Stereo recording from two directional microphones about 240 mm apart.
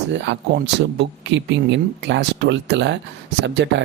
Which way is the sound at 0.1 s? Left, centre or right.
Right.